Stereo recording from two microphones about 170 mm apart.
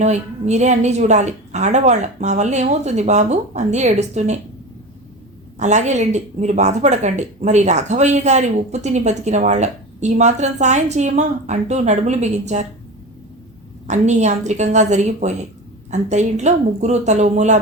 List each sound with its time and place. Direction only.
0.0 s speech: 40° right (ahead or behind)
5.5 s speech: 45° right (ahead or behind)
13.8 s speech: 45° right (ahead or behind)